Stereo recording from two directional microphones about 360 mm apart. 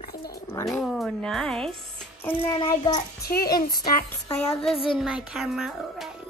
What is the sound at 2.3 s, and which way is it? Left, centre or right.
A woman's voice, centre.